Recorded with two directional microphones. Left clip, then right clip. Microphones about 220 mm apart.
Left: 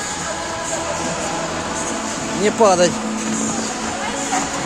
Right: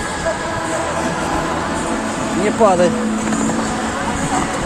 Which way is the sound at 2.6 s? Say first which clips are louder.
Right 1 dB; 45° left (ahead or behind).